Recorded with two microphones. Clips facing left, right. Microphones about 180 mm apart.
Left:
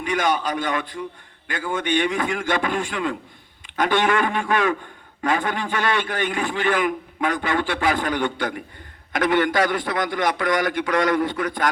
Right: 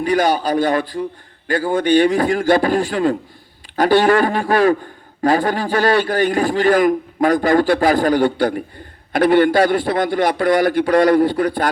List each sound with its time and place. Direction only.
0.0 s a man's voice: 35° right (ahead or behind)